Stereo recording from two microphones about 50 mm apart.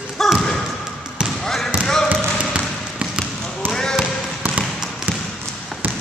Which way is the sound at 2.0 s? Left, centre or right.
Right.